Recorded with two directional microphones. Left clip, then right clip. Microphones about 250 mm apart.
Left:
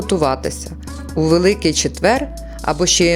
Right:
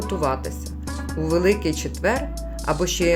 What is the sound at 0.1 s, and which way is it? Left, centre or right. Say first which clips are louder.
Speech: left 8 dB; left.